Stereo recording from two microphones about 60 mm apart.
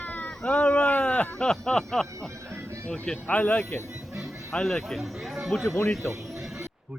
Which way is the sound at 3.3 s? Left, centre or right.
Left.